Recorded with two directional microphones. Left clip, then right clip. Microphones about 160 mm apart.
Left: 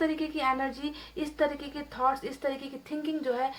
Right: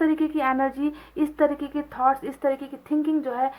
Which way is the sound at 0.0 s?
35° right (ahead or behind).